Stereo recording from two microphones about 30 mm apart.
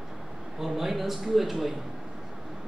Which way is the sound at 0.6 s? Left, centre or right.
Centre.